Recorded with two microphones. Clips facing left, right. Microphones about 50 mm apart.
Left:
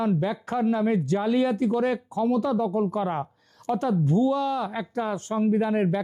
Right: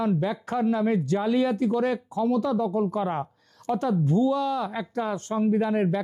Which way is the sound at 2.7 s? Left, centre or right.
Centre.